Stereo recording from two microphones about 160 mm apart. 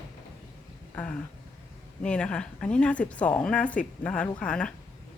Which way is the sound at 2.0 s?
5° left (ahead or behind).